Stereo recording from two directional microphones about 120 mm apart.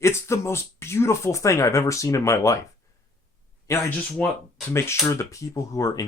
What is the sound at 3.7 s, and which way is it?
Speech, 25° left (ahead or behind).